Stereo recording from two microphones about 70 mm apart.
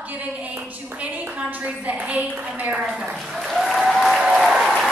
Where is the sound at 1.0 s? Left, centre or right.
Right.